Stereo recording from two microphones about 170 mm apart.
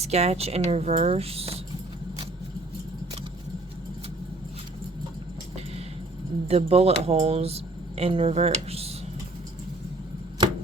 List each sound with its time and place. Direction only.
0.0 s speech: 40° right (ahead or behind)
6.5 s speech: 40° right (ahead or behind)